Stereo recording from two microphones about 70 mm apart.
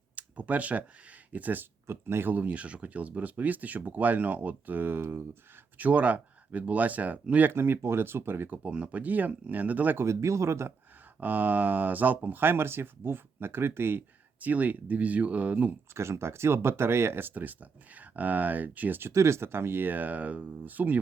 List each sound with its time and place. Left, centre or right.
0.2 s speech: right
1.9 s speech: right
2.3 s speech: right
7.5 s speech: right
10.0 s speech: right
11.2 s speech: right
14.4 s speech: right
16.0 s speech: right